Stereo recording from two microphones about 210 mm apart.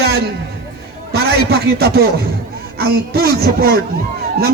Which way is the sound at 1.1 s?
50° right (ahead or behind).